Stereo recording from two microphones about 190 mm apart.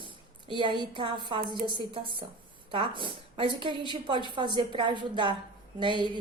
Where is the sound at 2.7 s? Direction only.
25° right (ahead or behind).